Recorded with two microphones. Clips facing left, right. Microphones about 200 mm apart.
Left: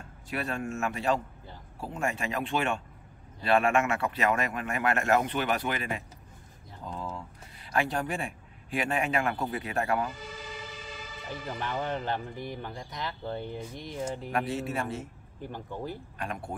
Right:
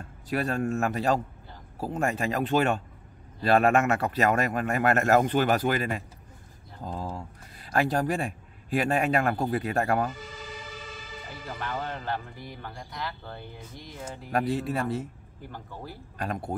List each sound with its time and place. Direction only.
0.3 s speech: 40° right (ahead or behind)
11.6 s speech: 20° left (ahead or behind)
14.3 s speech: 40° right (ahead or behind)
15.5 s speech: 20° left (ahead or behind)